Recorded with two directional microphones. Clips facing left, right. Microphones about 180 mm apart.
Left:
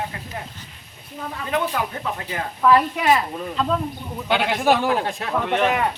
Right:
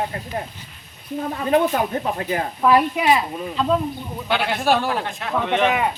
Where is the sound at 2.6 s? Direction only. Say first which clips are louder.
Even; 15° right (ahead or behind).